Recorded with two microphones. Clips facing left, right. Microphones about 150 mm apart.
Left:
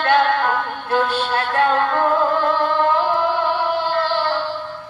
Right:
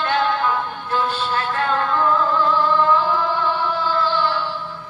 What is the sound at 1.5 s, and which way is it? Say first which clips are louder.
Music: left 5 dB; 60° left (ahead or behind).